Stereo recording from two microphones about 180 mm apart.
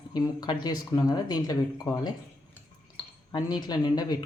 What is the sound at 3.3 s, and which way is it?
Speech, 25° left (ahead or behind).